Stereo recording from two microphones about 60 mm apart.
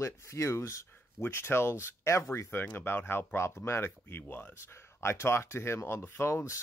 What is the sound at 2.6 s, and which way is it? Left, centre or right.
Speech, left.